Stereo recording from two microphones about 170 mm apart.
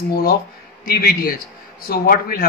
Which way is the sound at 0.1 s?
65° left (ahead or behind).